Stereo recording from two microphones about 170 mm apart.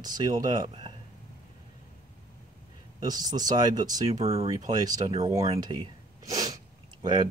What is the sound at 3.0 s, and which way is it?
Speech, 25° right (ahead or behind).